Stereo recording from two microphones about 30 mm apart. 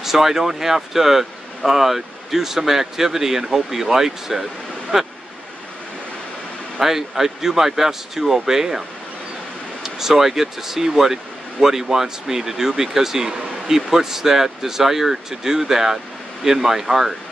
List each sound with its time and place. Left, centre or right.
0.0 s speech: centre
4.9 s speech: right
6.8 s speech: centre
9.8 s speech: centre